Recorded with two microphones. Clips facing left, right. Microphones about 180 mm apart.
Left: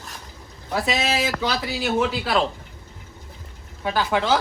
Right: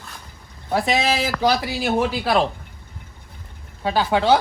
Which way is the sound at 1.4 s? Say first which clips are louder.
Right 5 dB; 35° right (ahead or behind).